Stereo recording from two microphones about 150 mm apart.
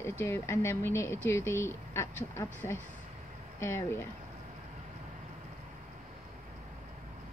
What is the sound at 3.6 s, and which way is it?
Speech, 15° left (ahead or behind).